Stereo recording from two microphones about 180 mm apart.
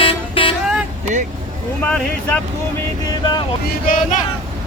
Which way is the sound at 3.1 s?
25° left (ahead or behind).